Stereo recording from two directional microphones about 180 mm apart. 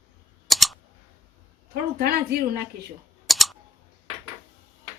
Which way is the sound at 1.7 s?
55° right (ahead or behind).